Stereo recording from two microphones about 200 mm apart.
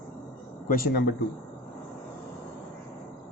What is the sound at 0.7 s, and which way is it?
Speech, 50° left (ahead or behind).